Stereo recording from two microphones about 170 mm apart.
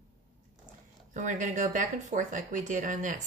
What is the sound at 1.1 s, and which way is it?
Speech, 45° right (ahead or behind).